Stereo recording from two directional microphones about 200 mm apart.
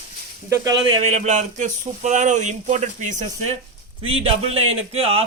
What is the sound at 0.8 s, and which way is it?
A man's voice, 30° right (ahead or behind).